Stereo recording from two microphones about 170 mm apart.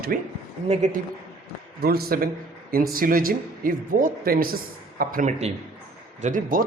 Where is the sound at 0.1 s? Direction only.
55° right (ahead or behind).